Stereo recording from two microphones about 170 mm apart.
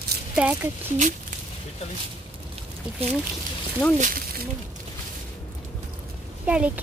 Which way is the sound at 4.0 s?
55° right (ahead or behind).